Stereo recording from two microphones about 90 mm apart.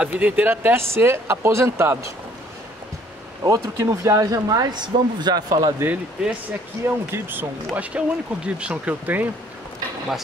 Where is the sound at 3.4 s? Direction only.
40° right (ahead or behind).